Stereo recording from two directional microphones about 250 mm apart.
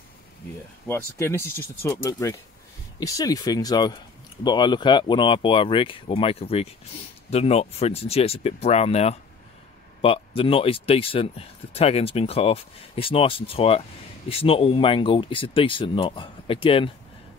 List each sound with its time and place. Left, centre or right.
0.8 s speech: centre